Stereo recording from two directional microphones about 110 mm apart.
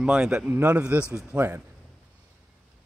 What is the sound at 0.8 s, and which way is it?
Speech, 10° right (ahead or behind).